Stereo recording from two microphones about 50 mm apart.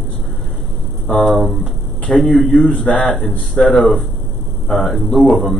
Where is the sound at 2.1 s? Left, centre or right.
Centre.